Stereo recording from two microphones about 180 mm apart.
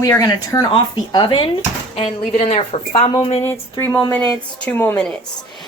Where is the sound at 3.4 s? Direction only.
15° left (ahead or behind).